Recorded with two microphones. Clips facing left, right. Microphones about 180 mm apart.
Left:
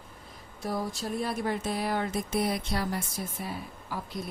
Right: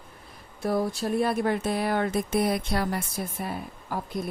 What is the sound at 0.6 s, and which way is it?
Speech, 60° right (ahead or behind).